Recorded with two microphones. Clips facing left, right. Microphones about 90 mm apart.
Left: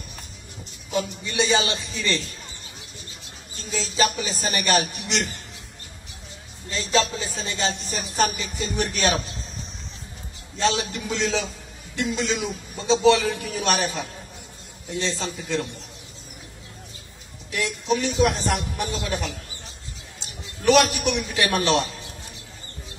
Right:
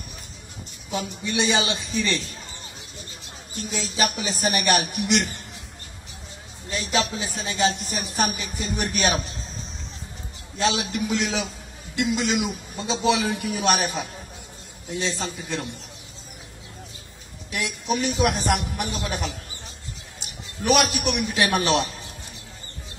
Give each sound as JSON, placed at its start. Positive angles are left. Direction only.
{"t": 0.9, "sound": "a man's voice", "side_deg": -15}
{"t": 3.7, "sound": "a man's voice", "side_deg": -15}
{"t": 6.7, "sound": "a man's voice", "side_deg": -15}
{"t": 10.6, "sound": "a man's voice", "side_deg": -5}
{"t": 17.5, "sound": "a man's voice", "side_deg": -15}